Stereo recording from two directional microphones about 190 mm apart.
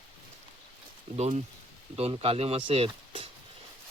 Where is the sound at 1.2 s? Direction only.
35° right (ahead or behind).